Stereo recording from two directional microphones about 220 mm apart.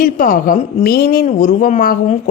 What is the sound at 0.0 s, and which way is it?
A woman's voice, 40° left (ahead or behind).